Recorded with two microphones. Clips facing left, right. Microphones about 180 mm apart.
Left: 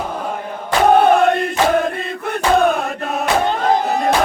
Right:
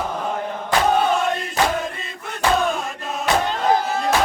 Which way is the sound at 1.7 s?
60° left (ahead or behind).